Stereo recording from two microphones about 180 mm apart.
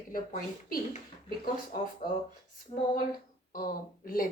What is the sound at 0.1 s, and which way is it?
Speech, 50° left (ahead or behind).